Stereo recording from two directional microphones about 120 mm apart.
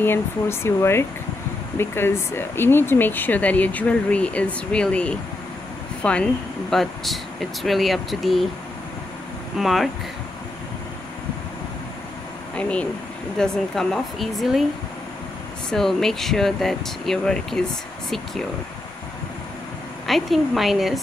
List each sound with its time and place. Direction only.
0.0 s speech: 20° left (ahead or behind); by 8.5 s centre (ahead or behind)
9.6 s speech: centre (ahead or behind)
12.5 s speech: 10° left (ahead or behind)
15.7 s speech: 5° left (ahead or behind)
20.1 s speech: centre (ahead or behind)